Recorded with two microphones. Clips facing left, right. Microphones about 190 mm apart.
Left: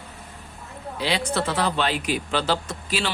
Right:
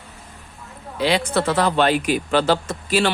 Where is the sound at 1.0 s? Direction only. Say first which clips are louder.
Right 5 dB; 55° right (ahead or behind).